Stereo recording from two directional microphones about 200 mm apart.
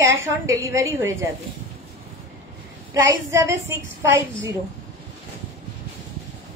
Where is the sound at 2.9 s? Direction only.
15° right (ahead or behind).